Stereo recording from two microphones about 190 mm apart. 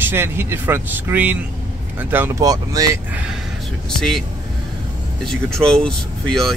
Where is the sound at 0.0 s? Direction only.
10° right (ahead or behind).